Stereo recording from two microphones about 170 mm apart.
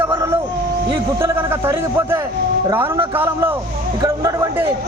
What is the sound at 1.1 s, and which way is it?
A man's voice, 15° right (ahead or behind).